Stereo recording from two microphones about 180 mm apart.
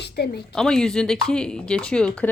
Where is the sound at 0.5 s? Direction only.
5° left (ahead or behind).